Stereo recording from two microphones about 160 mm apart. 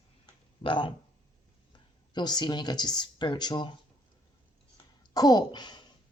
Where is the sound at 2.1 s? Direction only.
25° left (ahead or behind).